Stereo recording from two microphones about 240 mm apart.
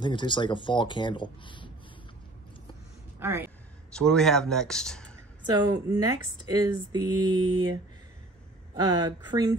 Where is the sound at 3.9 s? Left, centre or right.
Centre.